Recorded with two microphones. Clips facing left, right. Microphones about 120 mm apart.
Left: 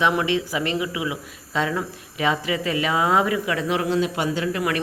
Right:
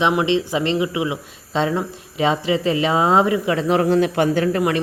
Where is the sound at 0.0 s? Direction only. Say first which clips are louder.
Right 3 dB; 20° right (ahead or behind); by 4.4 s 55° right (ahead or behind).